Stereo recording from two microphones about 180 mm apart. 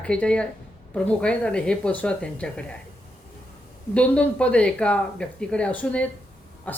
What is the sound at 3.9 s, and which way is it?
Speech, 5° left (ahead or behind).